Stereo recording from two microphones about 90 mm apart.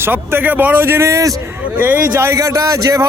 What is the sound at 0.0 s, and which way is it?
A man's voice, 25° right (ahead or behind).